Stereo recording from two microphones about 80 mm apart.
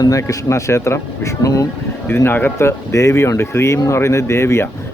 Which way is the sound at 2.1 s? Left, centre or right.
Left.